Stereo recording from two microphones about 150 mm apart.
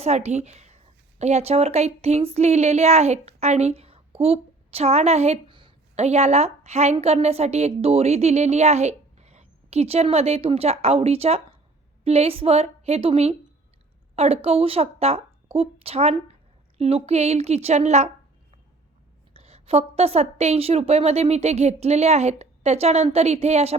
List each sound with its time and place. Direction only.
0.0 s a woman's voice: 45° right (ahead or behind)
5.5 s a sound: 35° right (ahead or behind)
6.0 s a woman's voice: 45° right (ahead or behind)
19.3 s a woman's voice: 45° right (ahead or behind)